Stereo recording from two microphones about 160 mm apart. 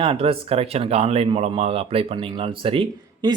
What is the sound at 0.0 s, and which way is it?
Speech, 35° right (ahead or behind).